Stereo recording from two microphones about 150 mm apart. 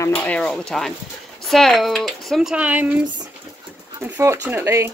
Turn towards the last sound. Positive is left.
turn(degrees=-15)  # may be behind; listen again after turning